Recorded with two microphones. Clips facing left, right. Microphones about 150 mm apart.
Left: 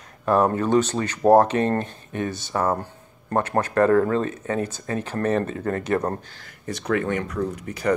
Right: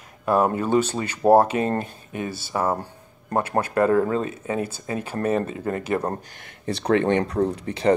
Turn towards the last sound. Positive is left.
turn(degrees=-30)  # may be behind; listen again after turning